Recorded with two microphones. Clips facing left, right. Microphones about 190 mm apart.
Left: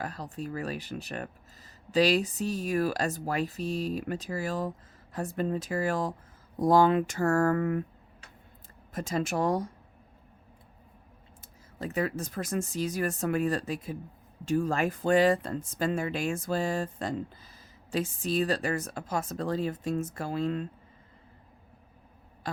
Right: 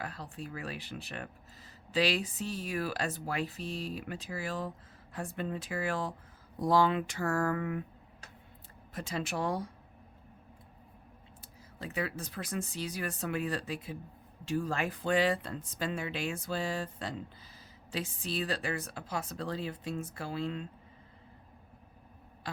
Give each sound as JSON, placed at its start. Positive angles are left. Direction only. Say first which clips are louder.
{"t": 0.0, "sound": "speech", "louder": "left 5 dB", "side_deg": 40}
{"t": 8.9, "sound": "speech", "louder": "left 6 dB", "side_deg": 45}
{"t": 11.8, "sound": "speech", "louder": "left 6 dB", "side_deg": 45}